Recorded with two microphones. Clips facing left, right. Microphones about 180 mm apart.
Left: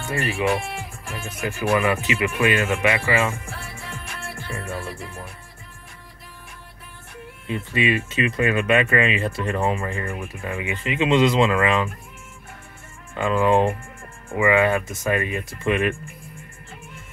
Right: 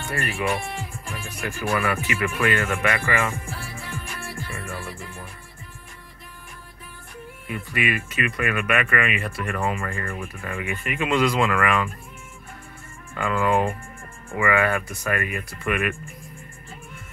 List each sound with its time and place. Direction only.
0.1 s speech: 20° left (ahead or behind)
7.4 s speech: 25° left (ahead or behind)
13.1 s speech: 20° left (ahead or behind)